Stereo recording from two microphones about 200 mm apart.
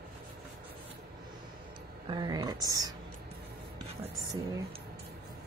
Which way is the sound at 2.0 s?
20° right (ahead or behind).